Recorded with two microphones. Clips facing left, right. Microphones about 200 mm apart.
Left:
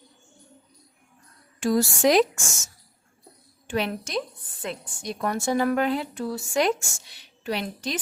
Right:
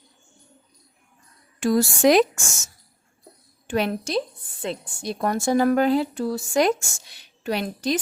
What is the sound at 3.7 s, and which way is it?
A woman's voice, 40° right (ahead or behind).